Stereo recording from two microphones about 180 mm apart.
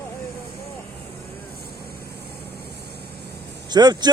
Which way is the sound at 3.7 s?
25° right (ahead or behind).